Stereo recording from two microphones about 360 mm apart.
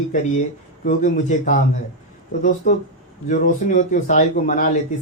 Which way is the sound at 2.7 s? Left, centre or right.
Left.